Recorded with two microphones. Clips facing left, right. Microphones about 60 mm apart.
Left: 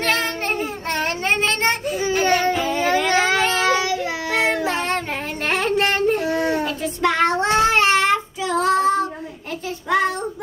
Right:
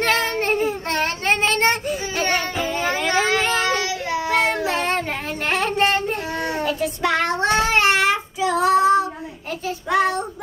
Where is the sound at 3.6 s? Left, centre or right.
Centre.